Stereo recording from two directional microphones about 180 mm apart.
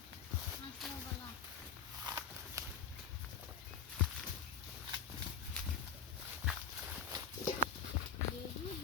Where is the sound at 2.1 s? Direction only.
20° right (ahead or behind).